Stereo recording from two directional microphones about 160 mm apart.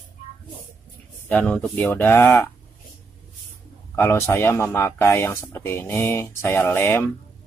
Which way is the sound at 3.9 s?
15° left (ahead or behind).